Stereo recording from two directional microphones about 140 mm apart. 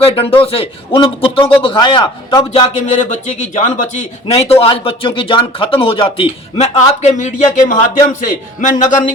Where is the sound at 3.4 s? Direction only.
60° left (ahead or behind).